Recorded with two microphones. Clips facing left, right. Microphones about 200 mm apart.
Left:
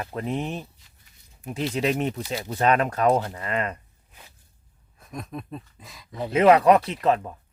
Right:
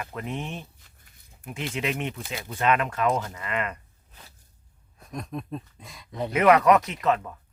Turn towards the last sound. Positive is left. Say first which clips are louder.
# left 2 dB
turn(degrees=30)  # may be behind; listen again after turning